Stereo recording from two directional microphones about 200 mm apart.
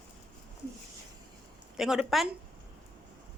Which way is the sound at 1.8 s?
Centre (ahead or behind).